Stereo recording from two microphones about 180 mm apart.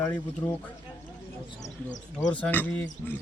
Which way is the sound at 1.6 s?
40° left (ahead or behind).